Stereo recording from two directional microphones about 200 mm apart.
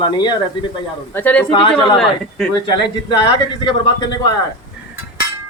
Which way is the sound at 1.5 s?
25° left (ahead or behind).